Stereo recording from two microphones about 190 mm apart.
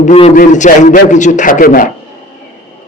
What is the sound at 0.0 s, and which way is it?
A man's voice, 35° left (ahead or behind).